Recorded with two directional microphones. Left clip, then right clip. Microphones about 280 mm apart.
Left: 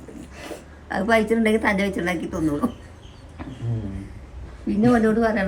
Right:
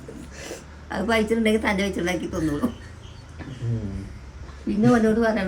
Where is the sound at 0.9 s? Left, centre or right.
Centre.